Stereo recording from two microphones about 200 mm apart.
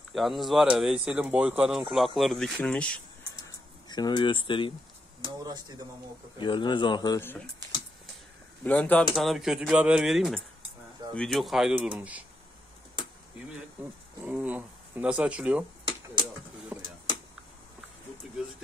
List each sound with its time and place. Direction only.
0.1 s speech: centre (ahead or behind)
3.4 s a sound: 20° left (ahead or behind)
5.2 s speech: 20° right (ahead or behind)
6.3 s speech: 25° left (ahead or behind)
8.6 s speech: 5° left (ahead or behind)
14.2 s speech: 5° right (ahead or behind)
16.7 s a sound: 10° right (ahead or behind)